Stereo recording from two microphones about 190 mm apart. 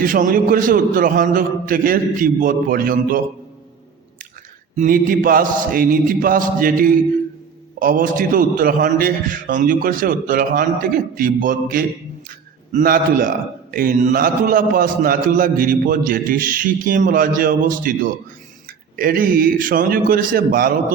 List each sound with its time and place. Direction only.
0.0 s a man's voice: 45° right (ahead or behind)
4.8 s a man's voice: 45° right (ahead or behind)